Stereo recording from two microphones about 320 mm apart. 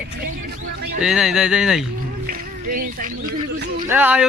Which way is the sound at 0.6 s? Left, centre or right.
Right.